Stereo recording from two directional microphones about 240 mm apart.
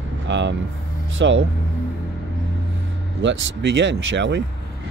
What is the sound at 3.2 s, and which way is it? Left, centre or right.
Speech, right.